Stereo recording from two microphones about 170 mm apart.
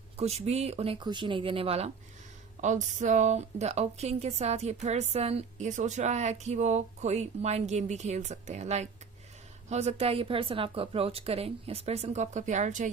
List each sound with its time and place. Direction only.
0.2 s a woman's voice: 40° right (ahead or behind)
2.6 s a woman's voice: 45° right (ahead or behind)